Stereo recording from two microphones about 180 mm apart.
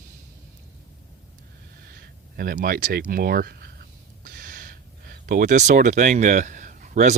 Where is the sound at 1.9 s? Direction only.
55° right (ahead or behind).